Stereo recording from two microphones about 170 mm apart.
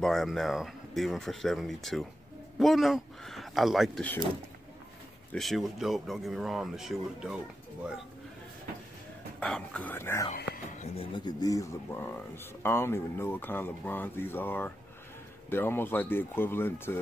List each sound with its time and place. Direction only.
0.0 s speech: centre (ahead or behind)
5.3 s speech: centre (ahead or behind)
9.4 s speech: 5° left (ahead or behind)
10.3 s music: 60° left (ahead or behind)
11.1 s speech: 25° left (ahead or behind)